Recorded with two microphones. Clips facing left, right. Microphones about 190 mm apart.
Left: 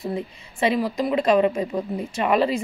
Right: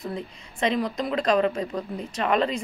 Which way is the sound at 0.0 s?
5° left (ahead or behind).